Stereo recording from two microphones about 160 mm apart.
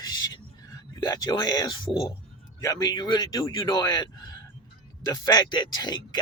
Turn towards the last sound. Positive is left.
turn(degrees=25)  # may be behind; listen again after turning